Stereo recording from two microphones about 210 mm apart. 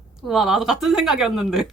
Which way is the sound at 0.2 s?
Centre (ahead or behind).